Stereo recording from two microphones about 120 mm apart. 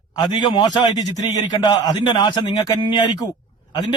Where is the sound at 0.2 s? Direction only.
35° left (ahead or behind).